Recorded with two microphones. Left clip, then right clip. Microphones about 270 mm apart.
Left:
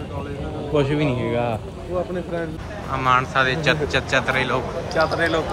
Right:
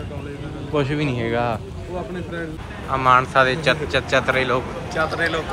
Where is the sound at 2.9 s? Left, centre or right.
Centre.